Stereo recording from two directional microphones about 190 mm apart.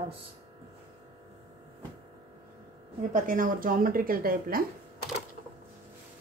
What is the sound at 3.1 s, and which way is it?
A woman's voice, 45° right (ahead or behind).